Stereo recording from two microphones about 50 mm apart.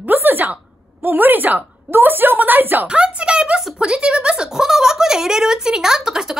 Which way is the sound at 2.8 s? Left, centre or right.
Centre.